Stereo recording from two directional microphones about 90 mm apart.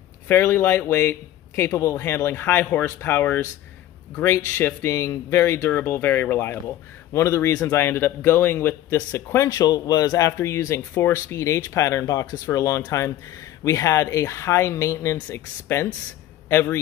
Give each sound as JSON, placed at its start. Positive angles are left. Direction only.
{"t": 0.3, "sound": "speech", "side_deg": 30}
{"t": 9.1, "sound": "speech", "side_deg": 35}